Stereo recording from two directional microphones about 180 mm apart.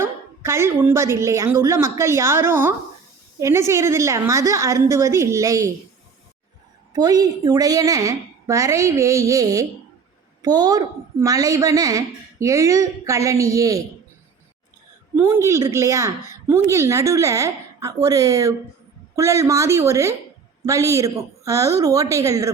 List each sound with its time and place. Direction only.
0.0 s a woman's voice: 15° right (ahead or behind)
6.9 s a woman's voice: 20° right (ahead or behind)
15.1 s a woman's voice: 15° right (ahead or behind)